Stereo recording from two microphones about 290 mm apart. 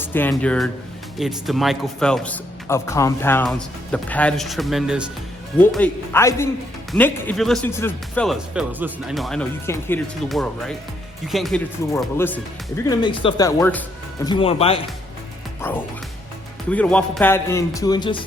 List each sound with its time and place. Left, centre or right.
0.0 s speech: centre
14.3 s speech: centre
16.6 s speech: centre